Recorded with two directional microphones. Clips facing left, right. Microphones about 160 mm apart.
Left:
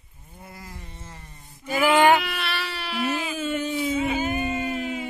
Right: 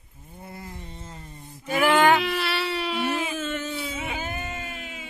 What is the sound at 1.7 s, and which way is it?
Sheep, 10° left (ahead or behind).